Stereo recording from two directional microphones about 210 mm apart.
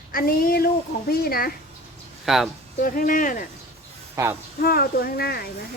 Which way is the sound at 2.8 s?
40° left (ahead or behind).